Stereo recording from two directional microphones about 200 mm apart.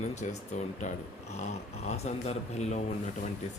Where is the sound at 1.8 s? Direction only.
30° left (ahead or behind).